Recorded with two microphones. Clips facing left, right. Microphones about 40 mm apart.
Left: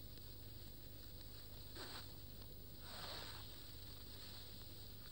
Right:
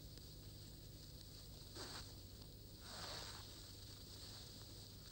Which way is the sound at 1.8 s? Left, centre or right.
Centre.